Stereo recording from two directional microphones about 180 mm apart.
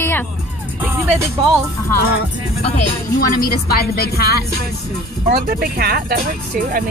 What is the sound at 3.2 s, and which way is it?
A woman's voice, 55° left (ahead or behind).